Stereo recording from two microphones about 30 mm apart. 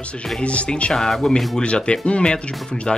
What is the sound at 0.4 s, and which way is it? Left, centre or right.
Speech, left.